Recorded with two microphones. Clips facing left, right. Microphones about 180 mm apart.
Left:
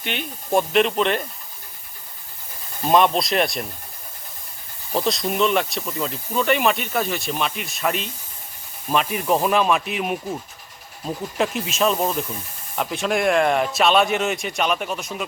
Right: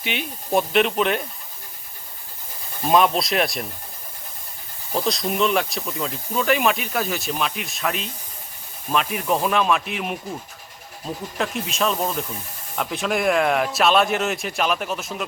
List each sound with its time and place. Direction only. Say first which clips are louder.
0.0 s speech: right 1 dB; 5° right (ahead or behind)
2.8 s speech: left 1 dB; centre (ahead or behind)
4.9 s speech: left 1 dB; centre (ahead or behind)
11.3 s speech: left 3 dB; 5° left (ahead or behind)